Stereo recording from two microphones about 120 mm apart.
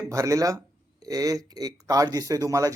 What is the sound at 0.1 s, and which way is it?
Speech, 25° right (ahead or behind).